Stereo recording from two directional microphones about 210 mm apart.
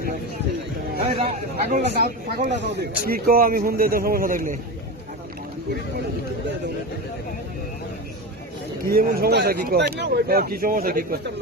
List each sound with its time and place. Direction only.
1.2 s speech: 30° right (ahead or behind)
1.8 s speech: 45° right (ahead or behind)
8.8 s speech: 45° right (ahead or behind)